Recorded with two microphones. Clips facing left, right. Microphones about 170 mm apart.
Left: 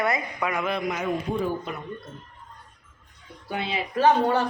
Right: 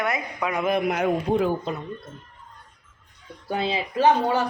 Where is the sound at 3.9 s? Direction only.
15° right (ahead or behind).